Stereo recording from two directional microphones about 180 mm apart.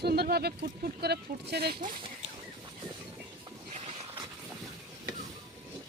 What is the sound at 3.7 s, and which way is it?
Vehicle, 35° right (ahead or behind).